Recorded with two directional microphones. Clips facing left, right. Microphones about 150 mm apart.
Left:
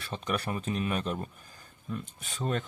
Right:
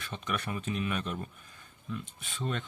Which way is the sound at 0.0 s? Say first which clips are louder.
Left 3 dB; 35° left (ahead or behind).